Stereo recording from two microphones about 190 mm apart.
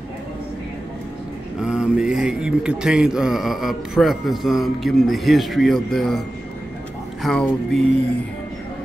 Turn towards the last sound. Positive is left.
turn(degrees=0)  # may be behind; listen again after turning